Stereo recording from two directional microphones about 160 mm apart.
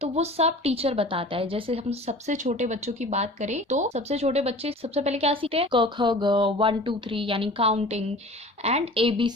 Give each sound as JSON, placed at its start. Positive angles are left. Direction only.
{"t": 0.0, "sound": "a woman's voice", "side_deg": -40}